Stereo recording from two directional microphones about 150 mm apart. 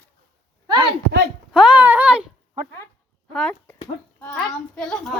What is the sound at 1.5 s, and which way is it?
Speech, 5° right (ahead or behind).